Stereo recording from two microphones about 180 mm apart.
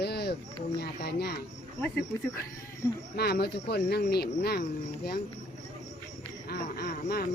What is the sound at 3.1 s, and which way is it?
Speech, 60° left (ahead or behind).